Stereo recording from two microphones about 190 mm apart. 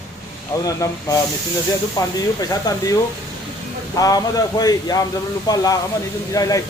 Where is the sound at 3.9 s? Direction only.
20° left (ahead or behind).